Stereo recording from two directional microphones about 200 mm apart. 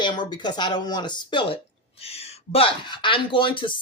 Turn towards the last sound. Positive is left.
turn(degrees=25)  # may be behind; listen again after turning